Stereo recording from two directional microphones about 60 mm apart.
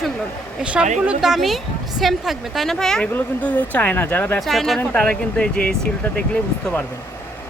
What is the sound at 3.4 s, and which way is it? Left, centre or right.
Speech, left.